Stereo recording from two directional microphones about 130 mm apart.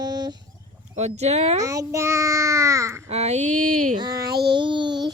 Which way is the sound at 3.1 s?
55° right (ahead or behind).